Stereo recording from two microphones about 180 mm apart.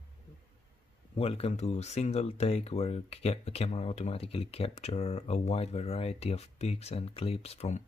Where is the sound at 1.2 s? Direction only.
35° left (ahead or behind).